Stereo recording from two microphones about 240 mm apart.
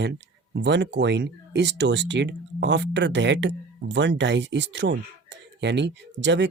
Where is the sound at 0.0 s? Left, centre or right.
Right.